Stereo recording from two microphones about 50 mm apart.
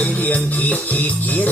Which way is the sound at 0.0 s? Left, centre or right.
Left.